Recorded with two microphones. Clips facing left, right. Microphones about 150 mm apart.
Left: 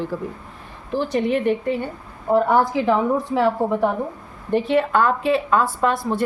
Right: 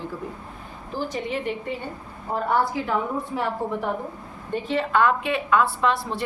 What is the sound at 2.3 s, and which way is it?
A woman's voice, 90° left.